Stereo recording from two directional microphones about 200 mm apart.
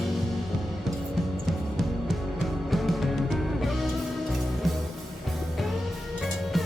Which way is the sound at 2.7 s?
Centre (ahead or behind).